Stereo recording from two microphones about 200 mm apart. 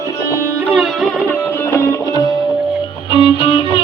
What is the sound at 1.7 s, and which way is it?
Music, 15° left (ahead or behind).